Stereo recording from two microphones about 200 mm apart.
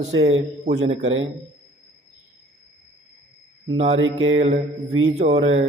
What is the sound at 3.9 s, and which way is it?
Speech, 75° right (ahead or behind).